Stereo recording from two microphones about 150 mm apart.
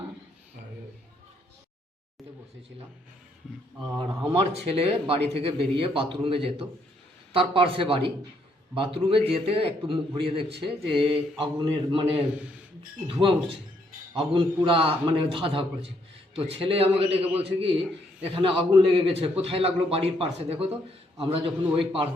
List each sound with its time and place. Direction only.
4.3 s a man's voice: 40° right (ahead or behind)
10.8 s speech: centre (ahead or behind)
11.1 s a man's voice: 35° right (ahead or behind)